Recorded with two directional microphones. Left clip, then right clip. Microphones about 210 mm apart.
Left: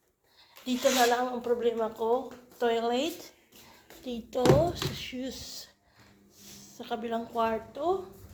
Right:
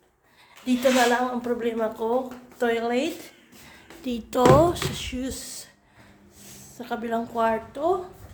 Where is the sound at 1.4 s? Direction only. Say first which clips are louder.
Right 2 dB; 10° right (ahead or behind).